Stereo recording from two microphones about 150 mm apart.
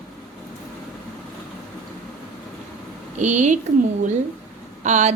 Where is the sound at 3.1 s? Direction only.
50° right (ahead or behind).